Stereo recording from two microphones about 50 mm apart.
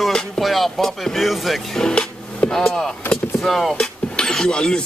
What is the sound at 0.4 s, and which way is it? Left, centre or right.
Speech, centre.